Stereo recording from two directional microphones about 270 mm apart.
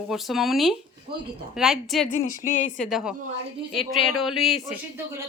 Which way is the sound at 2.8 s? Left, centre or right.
Centre.